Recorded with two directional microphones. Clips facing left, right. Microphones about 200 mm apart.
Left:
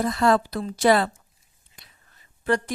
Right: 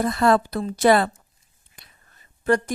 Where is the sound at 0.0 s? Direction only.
55° right (ahead or behind).